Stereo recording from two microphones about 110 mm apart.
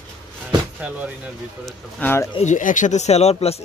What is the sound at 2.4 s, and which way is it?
Speech, 90° left.